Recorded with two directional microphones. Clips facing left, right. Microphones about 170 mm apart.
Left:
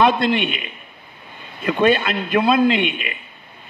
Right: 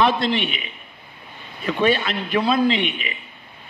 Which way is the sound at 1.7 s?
50° left (ahead or behind).